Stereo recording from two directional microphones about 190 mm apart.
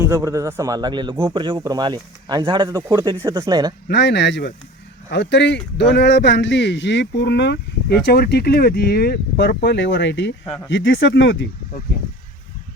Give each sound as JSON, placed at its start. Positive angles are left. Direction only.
{"t": 0.0, "sound": "a man's voice", "side_deg": -15}
{"t": 3.8, "sound": "speech", "side_deg": 65}